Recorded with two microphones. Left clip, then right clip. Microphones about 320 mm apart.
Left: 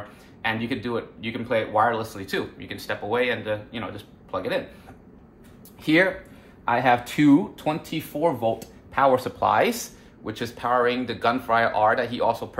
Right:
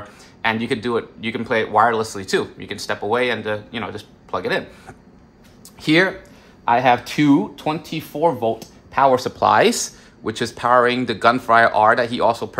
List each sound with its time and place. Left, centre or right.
0.4 s speech: right